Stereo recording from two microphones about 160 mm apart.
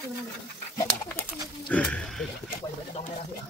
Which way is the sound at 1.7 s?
5° left (ahead or behind).